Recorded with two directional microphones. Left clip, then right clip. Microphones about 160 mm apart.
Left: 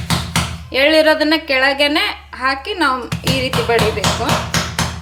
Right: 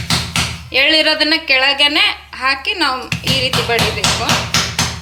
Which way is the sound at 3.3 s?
40° left (ahead or behind).